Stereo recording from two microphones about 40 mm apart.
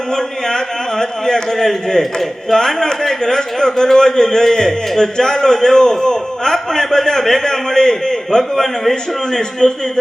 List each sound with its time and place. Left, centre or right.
0.2 s a man's voice: centre